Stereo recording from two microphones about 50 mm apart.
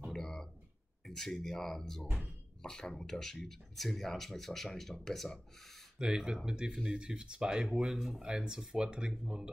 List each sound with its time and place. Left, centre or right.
0.1 s a sound: centre
1.0 s speech: centre
5.9 s speech: centre